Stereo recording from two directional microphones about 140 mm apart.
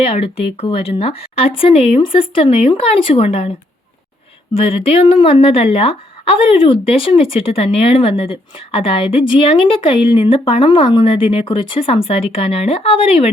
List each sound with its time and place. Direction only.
0.0 s speech: 45° left (ahead or behind)
4.5 s a woman's voice: 40° left (ahead or behind)